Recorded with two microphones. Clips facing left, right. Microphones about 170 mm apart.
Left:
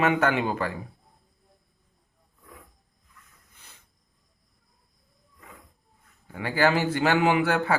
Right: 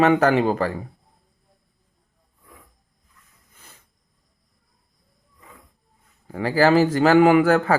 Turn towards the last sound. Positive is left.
turn(degrees=-45)  # may be behind; listen again after turning